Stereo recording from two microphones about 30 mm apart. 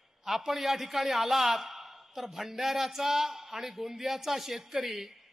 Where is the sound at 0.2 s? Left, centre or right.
Centre.